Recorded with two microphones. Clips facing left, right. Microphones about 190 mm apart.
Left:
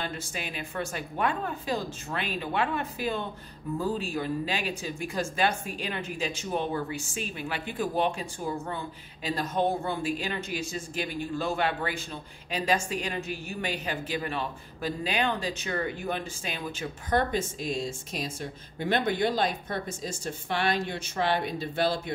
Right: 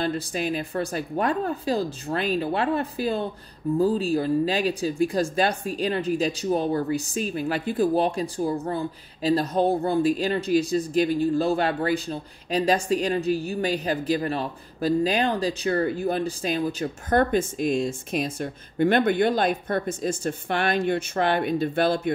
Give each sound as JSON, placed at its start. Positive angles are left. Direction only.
{"t": 0.0, "sound": "speech", "side_deg": -40}